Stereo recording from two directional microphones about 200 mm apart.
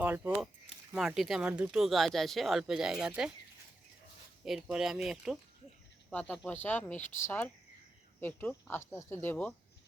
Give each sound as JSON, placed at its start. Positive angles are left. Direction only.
{"t": 0.0, "sound": "speech", "side_deg": -10}
{"t": 4.4, "sound": "speech", "side_deg": 0}